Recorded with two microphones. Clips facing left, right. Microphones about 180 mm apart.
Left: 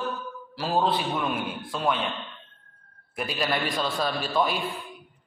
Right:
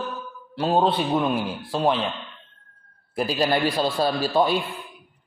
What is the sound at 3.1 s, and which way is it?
A man's voice, 30° right (ahead or behind).